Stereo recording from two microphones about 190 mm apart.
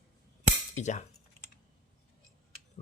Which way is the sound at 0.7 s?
40° left (ahead or behind).